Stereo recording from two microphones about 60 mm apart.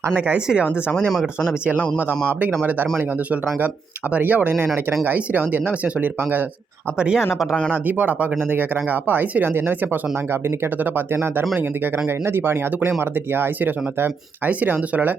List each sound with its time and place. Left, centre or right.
0.3 s speech: centre
1.1 s speech: centre
4.1 s speech: right
7.0 s speech: centre
7.7 s speech: right